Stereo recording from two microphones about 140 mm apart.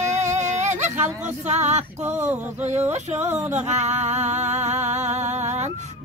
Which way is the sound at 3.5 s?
55° right (ahead or behind).